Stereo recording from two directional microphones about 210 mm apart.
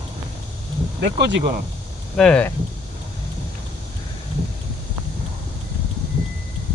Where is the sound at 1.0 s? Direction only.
50° right (ahead or behind).